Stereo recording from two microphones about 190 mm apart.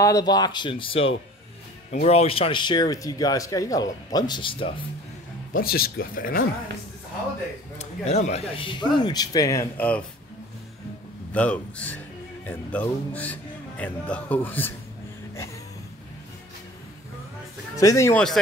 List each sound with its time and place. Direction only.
0.0 s speech: 20° left (ahead or behind)
5.5 s speech: 50° left (ahead or behind)
7.8 s speech: 35° left (ahead or behind); by 10.0 s 10° left (ahead or behind)
11.3 s speech: 5° left (ahead or behind)
17.7 s speech: 15° left (ahead or behind)